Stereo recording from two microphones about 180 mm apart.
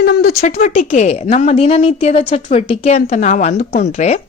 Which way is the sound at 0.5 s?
40° left (ahead or behind).